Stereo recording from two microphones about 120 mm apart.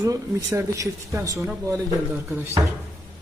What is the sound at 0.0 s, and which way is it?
Speech, 25° right (ahead or behind).